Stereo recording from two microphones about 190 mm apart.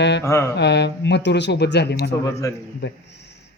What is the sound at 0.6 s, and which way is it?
A man's voice, 65° left (ahead or behind).